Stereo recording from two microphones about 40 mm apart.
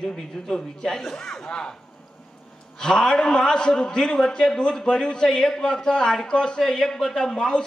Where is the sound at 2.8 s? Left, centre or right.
Centre.